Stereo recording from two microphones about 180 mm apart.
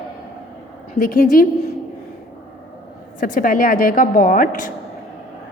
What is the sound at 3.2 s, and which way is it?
A woman's voice, 50° left (ahead or behind).